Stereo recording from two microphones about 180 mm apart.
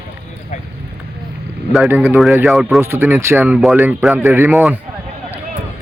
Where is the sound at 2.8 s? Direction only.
15° right (ahead or behind).